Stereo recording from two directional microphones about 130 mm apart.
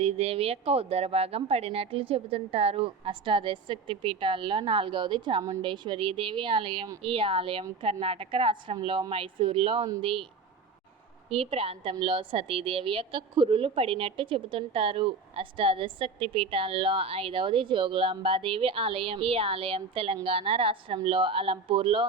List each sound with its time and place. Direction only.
0.0 s a woman's voice: 50° right (ahead or behind)
11.3 s a woman's voice: 50° right (ahead or behind)